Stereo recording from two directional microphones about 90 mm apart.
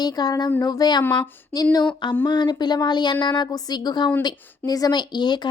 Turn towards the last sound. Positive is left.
turn(degrees=55)  # may be behind; listen again after turning